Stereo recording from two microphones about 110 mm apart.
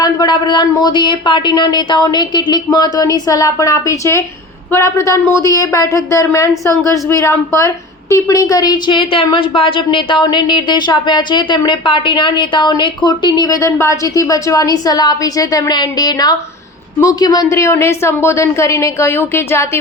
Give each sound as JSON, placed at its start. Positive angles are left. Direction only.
{"t": 0.0, "sound": "a woman's voice", "side_deg": 40}
{"t": 13.6, "sound": "a woman's voice", "side_deg": 25}